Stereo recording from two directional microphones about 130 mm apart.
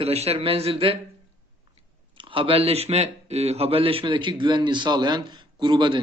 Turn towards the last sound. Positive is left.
turn(degrees=-35)  # may be behind; listen again after turning